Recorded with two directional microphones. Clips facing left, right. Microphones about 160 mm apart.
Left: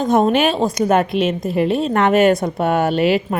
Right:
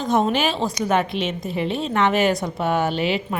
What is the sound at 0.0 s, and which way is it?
A woman's voice, 50° left (ahead or behind).